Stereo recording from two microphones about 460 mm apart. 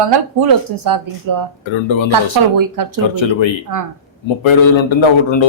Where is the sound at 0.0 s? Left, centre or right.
Right.